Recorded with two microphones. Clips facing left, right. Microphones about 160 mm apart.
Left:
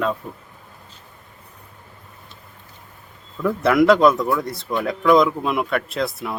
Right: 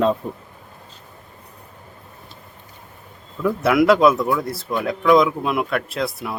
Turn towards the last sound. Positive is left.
turn(degrees=0)  # may be behind; listen again after turning